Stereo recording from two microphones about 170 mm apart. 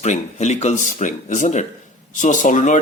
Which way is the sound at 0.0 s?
45° left (ahead or behind).